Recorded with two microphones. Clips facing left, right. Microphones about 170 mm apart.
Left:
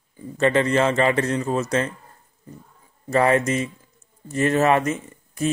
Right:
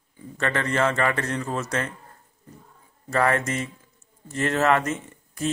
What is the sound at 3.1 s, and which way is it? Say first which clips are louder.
A man's voice: left 4 dB; 20° left (ahead or behind).